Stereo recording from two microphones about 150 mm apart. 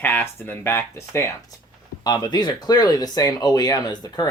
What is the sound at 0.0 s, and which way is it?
Speech, 15° left (ahead or behind).